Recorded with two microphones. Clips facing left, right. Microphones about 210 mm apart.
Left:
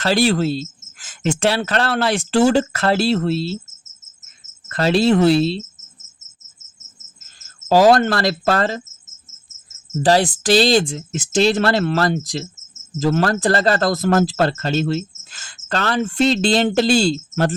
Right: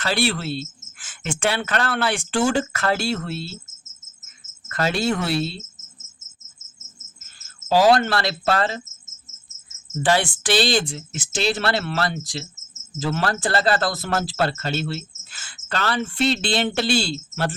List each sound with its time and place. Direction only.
0.0 s speech: 40° left (ahead or behind)
4.7 s speech: 35° left (ahead or behind)
7.3 s cricket: 40° left (ahead or behind)
9.6 s speech: 35° left (ahead or behind)